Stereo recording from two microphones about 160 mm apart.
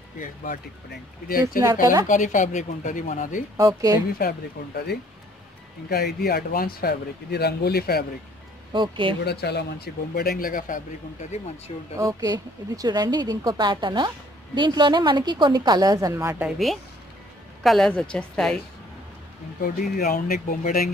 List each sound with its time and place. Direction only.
0.2 s speech: 55° left (ahead or behind)
0.8 s speech: 70° left (ahead or behind)
2.0 s speech: 55° left (ahead or behind)
3.5 s a woman's voice: 20° right (ahead or behind)
4.2 s speech: 75° left (ahead or behind)
8.7 s speech: 30° right (ahead or behind)
9.2 s speech: 90° left; by 11.7 s 45° left (ahead or behind)
12.0 s a woman's voice: 20° right (ahead or behind)
16.4 s a woman's voice: centre (ahead or behind)
19.6 s speech: 65° left (ahead or behind)